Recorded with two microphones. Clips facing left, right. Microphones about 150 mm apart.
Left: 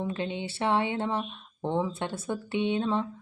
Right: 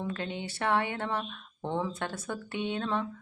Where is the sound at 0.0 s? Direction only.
20° left (ahead or behind).